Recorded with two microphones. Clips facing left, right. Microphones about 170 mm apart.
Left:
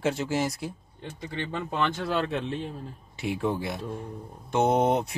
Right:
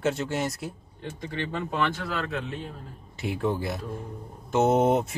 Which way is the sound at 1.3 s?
20° left (ahead or behind).